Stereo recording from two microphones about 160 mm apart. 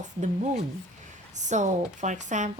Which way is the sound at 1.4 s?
50° right (ahead or behind).